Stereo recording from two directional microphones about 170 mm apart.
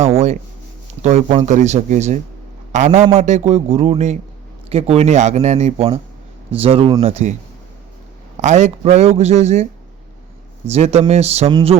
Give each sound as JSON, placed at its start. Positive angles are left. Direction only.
{"t": 0.0, "sound": "a man's voice", "side_deg": -40}
{"t": 8.4, "sound": "a man's voice", "side_deg": -45}
{"t": 10.7, "sound": "a man's voice", "side_deg": -40}